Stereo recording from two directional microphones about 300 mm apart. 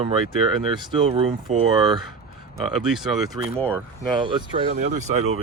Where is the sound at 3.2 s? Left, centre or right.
Centre.